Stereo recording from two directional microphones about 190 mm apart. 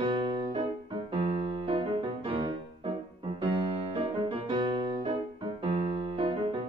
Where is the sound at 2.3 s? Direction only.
25° right (ahead or behind).